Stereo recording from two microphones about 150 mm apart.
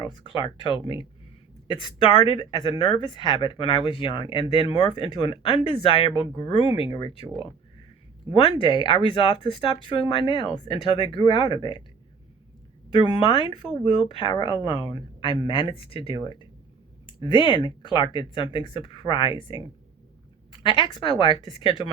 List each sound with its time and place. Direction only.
0.0 s speech: 35° left (ahead or behind)
8.3 s speech: 35° left (ahead or behind)
13.1 s speech: 35° left (ahead or behind)